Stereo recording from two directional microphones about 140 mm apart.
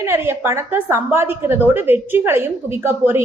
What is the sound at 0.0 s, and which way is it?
A woman's voice, 15° right (ahead or behind).